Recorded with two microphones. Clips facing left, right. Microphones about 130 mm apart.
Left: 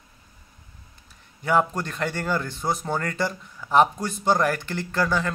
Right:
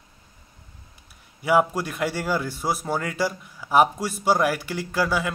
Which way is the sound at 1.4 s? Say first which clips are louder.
Right 2 dB; 10° right (ahead or behind).